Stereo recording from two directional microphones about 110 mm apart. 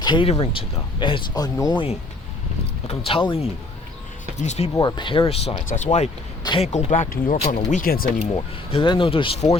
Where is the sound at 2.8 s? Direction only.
55° left (ahead or behind).